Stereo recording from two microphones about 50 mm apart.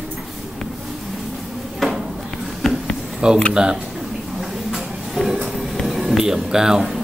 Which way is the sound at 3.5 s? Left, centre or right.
Centre.